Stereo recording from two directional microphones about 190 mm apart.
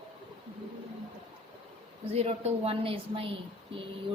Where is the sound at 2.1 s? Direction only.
35° right (ahead or behind).